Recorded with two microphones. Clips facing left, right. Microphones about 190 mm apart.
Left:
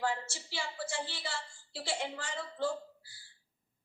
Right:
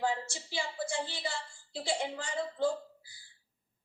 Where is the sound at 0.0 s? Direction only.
15° right (ahead or behind).